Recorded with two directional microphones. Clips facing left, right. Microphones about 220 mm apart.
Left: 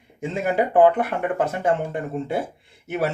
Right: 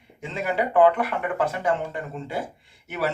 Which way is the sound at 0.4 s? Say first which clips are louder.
Left 2 dB; 45° left (ahead or behind).